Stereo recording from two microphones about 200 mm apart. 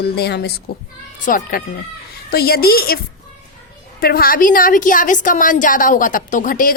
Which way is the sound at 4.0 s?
50° left (ahead or behind).